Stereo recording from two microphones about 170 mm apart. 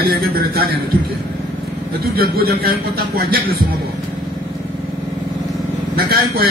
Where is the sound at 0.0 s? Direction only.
65° right (ahead or behind).